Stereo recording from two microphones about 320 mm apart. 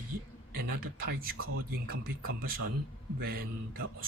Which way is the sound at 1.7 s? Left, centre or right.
Right.